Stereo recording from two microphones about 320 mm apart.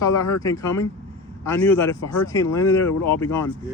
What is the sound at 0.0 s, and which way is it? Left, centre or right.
Speech, centre.